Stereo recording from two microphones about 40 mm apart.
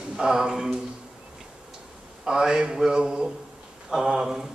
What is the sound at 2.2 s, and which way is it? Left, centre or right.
A man's voice, centre.